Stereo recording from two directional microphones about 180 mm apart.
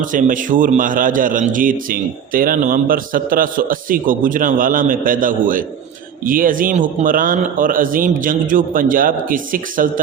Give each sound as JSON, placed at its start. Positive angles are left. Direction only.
{"t": 0.0, "sound": "a man's voice", "side_deg": -45}